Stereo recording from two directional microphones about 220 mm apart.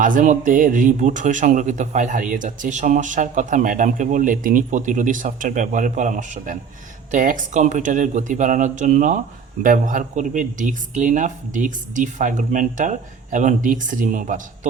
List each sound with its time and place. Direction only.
0.0 s speech: 35° right (ahead or behind)